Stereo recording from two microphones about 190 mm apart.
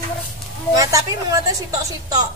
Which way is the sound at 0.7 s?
20° right (ahead or behind).